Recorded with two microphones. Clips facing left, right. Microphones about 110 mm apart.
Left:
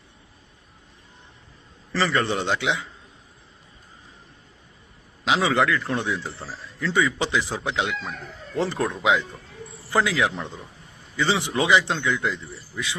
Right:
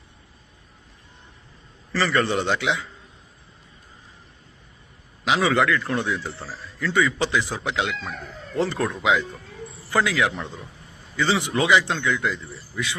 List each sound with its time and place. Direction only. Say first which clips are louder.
2.0 s a man's voice: right 1 dB; 20° left (ahead or behind)
5.2 s a man's voice: right 1 dB; 20° left (ahead or behind)